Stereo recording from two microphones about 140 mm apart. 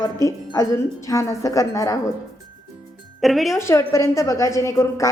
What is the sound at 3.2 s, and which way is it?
Speech, centre (ahead or behind).